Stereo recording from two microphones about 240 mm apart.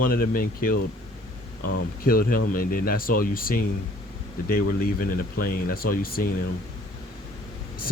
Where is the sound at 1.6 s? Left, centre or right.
Left.